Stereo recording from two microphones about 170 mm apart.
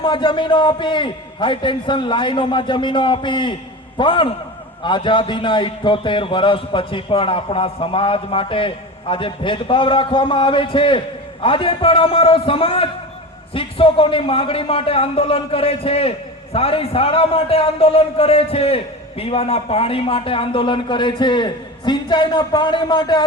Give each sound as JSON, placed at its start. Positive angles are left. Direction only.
{"t": 0.0, "sound": "a man's voice", "side_deg": 30}